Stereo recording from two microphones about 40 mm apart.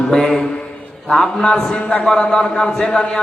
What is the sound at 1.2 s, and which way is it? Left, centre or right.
Speech, left.